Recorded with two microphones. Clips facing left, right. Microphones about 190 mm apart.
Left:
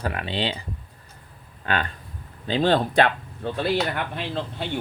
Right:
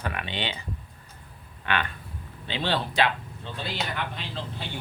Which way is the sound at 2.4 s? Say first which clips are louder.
Left 8 dB; 45° left (ahead or behind).